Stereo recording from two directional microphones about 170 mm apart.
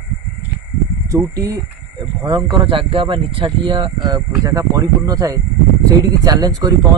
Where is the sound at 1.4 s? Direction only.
20° right (ahead or behind).